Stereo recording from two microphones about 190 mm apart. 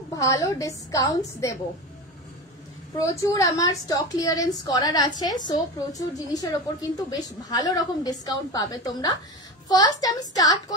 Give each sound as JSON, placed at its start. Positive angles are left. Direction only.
{"t": 0.1, "sound": "a woman's voice", "side_deg": 15}
{"t": 3.0, "sound": "a woman's voice", "side_deg": 15}